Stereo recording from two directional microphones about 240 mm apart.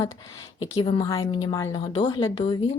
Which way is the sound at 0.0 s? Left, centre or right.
Centre.